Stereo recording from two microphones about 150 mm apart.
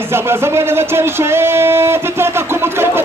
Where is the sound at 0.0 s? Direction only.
15° right (ahead or behind).